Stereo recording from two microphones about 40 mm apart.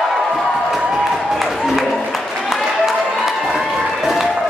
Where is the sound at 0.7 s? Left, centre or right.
Centre.